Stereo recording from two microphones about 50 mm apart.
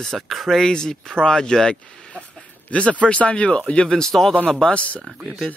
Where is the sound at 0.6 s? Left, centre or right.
Centre.